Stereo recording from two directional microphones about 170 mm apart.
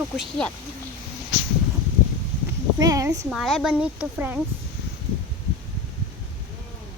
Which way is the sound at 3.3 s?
Centre (ahead or behind).